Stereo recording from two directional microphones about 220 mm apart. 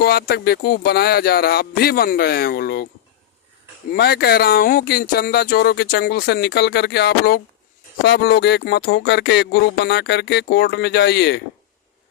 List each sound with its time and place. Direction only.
0.0 s speech: 45° left (ahead or behind)
3.9 s speech: 45° left (ahead or behind)